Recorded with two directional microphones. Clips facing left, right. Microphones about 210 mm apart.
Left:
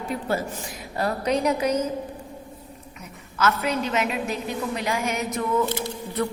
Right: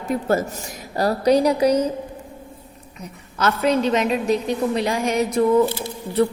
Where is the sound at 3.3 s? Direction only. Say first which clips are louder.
Right 5 dB; 35° right (ahead or behind).